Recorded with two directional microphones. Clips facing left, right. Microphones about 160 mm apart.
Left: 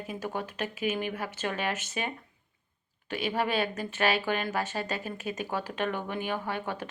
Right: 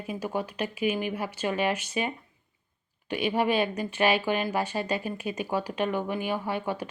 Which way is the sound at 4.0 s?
15° right (ahead or behind).